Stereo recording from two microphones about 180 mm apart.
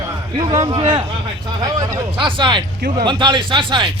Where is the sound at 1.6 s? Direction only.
20° right (ahead or behind).